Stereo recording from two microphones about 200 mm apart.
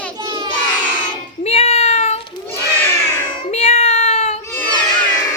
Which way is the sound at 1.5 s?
35° left (ahead or behind).